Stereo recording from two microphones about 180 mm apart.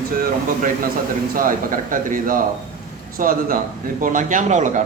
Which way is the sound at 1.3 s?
50° right (ahead or behind).